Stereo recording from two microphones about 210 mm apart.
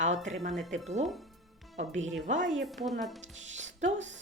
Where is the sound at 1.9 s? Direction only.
65° right (ahead or behind).